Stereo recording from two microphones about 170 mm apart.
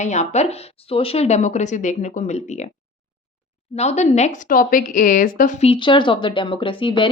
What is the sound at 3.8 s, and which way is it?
Speech, 40° left (ahead or behind).